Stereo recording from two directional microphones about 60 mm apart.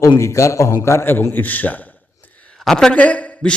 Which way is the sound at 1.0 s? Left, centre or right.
Left.